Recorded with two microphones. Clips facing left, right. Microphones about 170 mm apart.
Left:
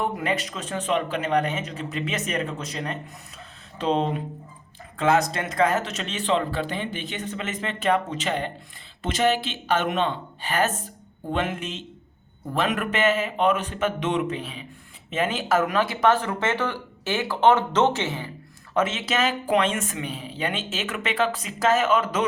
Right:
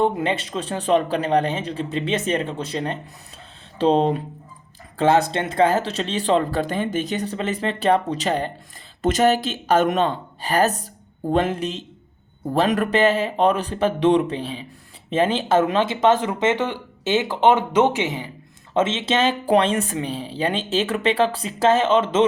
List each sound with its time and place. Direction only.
0.0 s speech: 25° right (ahead or behind)